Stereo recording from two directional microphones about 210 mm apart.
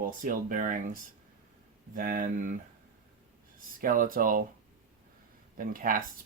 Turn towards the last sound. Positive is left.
turn(degrees=-40)  # may be behind; listen again after turning